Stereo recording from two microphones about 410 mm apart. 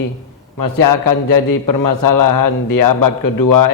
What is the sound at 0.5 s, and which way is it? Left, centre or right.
A man's voice, left.